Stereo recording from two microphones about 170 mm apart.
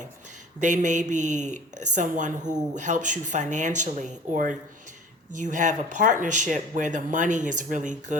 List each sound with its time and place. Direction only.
0.6 s speech: 45° right (ahead or behind)